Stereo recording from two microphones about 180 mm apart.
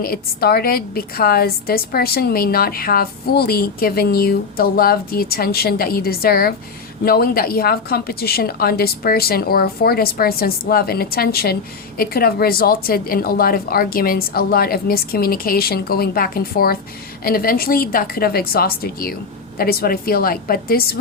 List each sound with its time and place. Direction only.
0.0 s a woman's voice: 55° left (ahead or behind)